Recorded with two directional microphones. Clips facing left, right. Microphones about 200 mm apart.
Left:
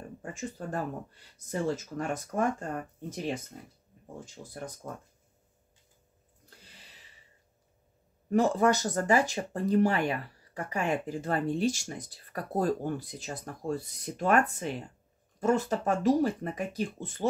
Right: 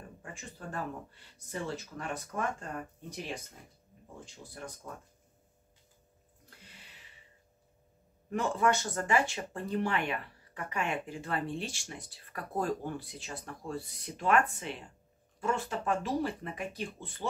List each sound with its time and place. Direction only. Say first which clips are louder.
0.2 s speech: left 9 dB; 40° left (ahead or behind)
4.4 s speech: left 4 dB; 50° left (ahead or behind)
8.3 s speech: left 5 dB; 40° left (ahead or behind)